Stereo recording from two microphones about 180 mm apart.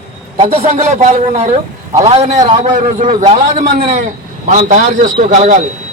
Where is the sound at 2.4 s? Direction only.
25° right (ahead or behind).